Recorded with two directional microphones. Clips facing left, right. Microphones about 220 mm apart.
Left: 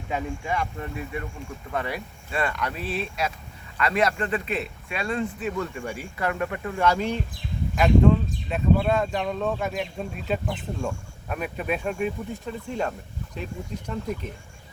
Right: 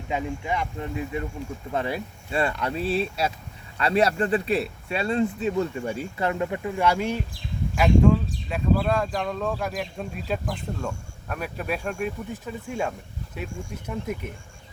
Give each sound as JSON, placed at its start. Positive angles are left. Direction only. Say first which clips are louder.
{"t": 0.1, "sound": "speech", "louder": "right 1 dB", "side_deg": -20}